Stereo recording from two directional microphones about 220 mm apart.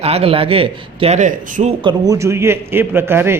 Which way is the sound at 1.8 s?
20° right (ahead or behind).